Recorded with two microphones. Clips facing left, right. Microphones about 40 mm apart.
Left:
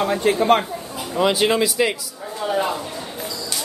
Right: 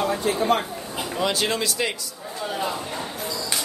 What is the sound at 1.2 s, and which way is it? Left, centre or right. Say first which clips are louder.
Speech: left 7 dB; centre.